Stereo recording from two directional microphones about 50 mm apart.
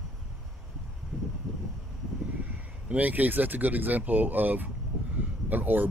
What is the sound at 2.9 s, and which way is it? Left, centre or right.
Speech, right.